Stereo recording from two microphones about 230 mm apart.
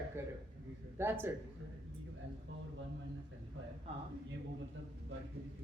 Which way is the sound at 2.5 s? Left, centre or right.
Right.